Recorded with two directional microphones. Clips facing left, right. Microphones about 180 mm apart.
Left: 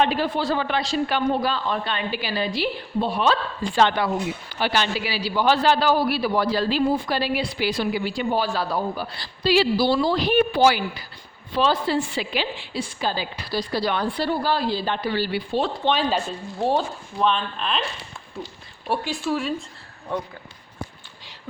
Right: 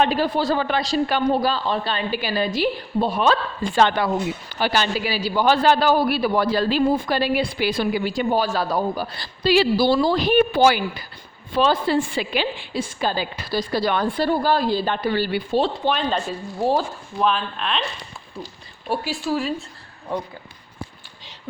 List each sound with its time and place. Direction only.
0.0 s a man's voice: 40° right (ahead or behind)
16.0 s speech: 5° left (ahead or behind)
18.9 s speech: centre (ahead or behind)